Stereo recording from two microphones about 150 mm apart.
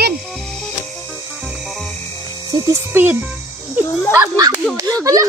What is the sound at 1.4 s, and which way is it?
Cricket, 5° right (ahead or behind).